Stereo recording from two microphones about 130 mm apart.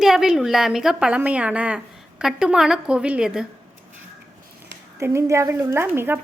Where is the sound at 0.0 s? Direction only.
5° right (ahead or behind).